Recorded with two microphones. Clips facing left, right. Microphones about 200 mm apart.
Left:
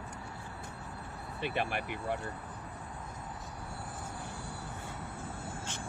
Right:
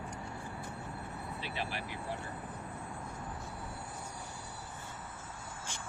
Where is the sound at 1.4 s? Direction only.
55° left (ahead or behind).